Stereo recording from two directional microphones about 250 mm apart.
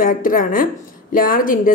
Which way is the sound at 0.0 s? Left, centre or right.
Left.